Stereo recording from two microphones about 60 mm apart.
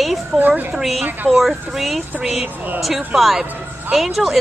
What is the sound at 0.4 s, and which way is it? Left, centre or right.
Speech, right.